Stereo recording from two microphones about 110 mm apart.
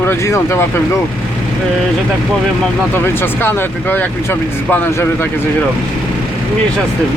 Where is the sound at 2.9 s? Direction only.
20° left (ahead or behind).